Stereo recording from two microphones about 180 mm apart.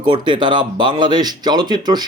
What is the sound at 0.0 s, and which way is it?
Speech, 25° right (ahead or behind).